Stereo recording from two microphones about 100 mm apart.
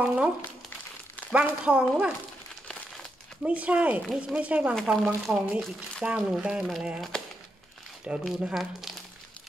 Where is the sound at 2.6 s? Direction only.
15° left (ahead or behind).